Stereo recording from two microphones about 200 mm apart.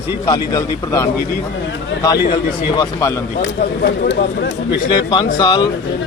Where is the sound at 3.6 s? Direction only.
55° left (ahead or behind).